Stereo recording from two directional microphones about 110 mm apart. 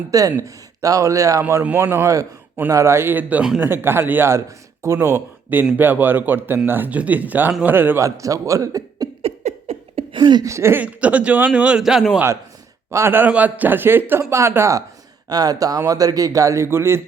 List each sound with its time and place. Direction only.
0.1 s a man's voice: 30° right (ahead or behind)
9.2 s a sound: 75° right (ahead or behind); by 10.4 s 45° right (ahead or behind)
10.4 s speech: 25° right (ahead or behind)
10.8 s a man's voice: 10° right (ahead or behind)
12.9 s speech: 20° right (ahead or behind)